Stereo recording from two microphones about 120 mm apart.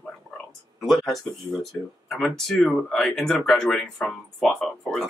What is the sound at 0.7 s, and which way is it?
Speech, centre (ahead or behind).